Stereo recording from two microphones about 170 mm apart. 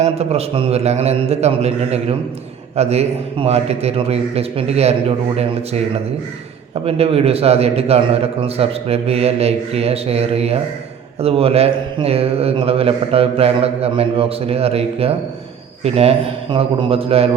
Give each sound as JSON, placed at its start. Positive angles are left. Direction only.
{"t": 0.0, "sound": "speech", "side_deg": -40}